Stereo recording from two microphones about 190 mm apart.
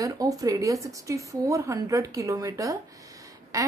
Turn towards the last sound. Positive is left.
turn(degrees=-15)  # may be behind; listen again after turning